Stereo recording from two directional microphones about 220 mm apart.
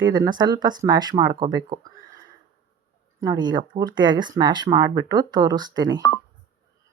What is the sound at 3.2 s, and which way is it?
Speech, 15° right (ahead or behind).